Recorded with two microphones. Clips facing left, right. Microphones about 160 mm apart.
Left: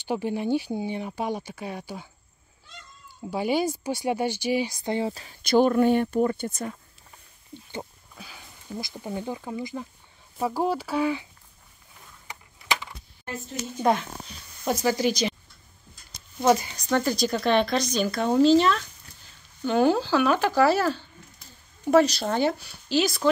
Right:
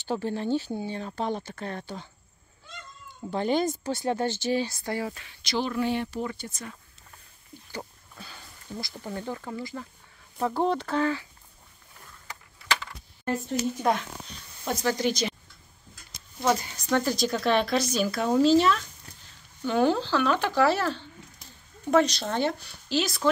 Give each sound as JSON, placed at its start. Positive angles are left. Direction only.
{"t": 0.0, "sound": "speech", "side_deg": 15}
{"t": 3.3, "sound": "speech", "side_deg": 10}
{"t": 5.1, "sound": "speech", "side_deg": 35}
{"t": 5.5, "sound": "speech", "side_deg": 50}
{"t": 8.2, "sound": "speech", "side_deg": 10}
{"t": 12.6, "sound": "coin", "side_deg": 15}
{"t": 13.9, "sound": "speech", "side_deg": 0}
{"t": 16.4, "sound": "speech", "side_deg": 0}